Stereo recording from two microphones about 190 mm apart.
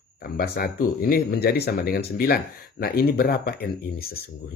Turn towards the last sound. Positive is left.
turn(degrees=55)  # may be behind; listen again after turning